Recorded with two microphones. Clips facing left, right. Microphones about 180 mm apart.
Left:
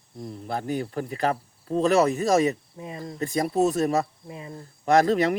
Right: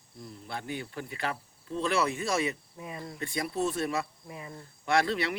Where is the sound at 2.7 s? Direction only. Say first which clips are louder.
Left 5 dB; 30° left (ahead or behind).